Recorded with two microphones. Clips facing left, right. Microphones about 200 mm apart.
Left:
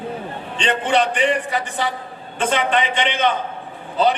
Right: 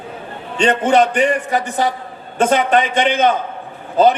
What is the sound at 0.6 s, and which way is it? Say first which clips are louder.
A man's voice: right 6 dB; 45° right (ahead or behind).